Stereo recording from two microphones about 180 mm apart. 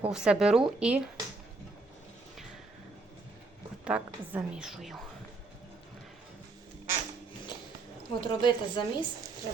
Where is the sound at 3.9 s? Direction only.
5° right (ahead or behind).